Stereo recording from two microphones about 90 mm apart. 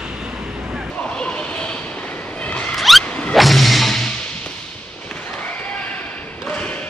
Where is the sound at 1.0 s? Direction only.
10° left (ahead or behind).